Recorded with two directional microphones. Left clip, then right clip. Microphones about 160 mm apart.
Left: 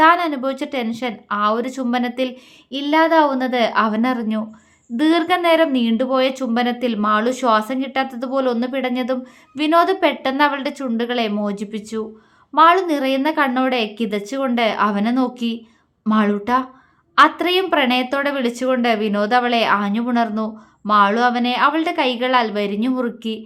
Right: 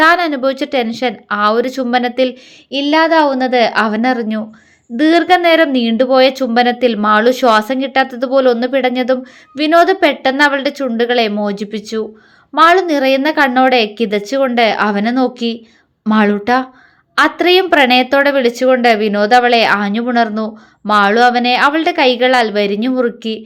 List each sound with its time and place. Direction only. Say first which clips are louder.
0.0 s a woman's voice: right 4 dB; 25° right (ahead or behind)